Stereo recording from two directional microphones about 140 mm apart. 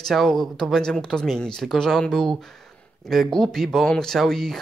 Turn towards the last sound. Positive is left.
turn(degrees=0)  # may be behind; listen again after turning